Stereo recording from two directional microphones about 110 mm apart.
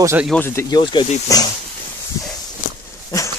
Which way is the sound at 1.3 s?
30° left (ahead or behind).